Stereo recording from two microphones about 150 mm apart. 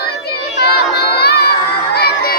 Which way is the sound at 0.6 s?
90° left.